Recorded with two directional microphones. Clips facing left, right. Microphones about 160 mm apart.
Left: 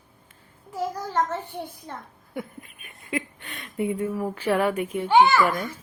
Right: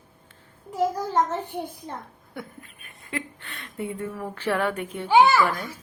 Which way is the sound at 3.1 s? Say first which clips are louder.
Left 3 dB; 15° left (ahead or behind).